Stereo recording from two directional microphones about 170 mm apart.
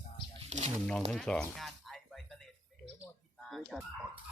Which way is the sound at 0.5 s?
45° right (ahead or behind).